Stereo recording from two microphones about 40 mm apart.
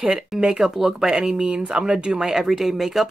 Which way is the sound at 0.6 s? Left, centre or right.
Centre.